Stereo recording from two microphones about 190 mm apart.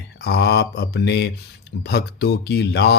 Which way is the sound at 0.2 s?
60° left (ahead or behind).